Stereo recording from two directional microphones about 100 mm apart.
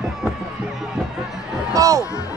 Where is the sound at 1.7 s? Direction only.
35° right (ahead or behind).